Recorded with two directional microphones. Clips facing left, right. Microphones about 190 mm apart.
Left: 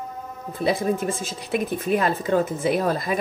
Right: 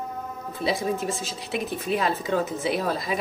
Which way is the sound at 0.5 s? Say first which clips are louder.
Left 4 dB; 50° left (ahead or behind).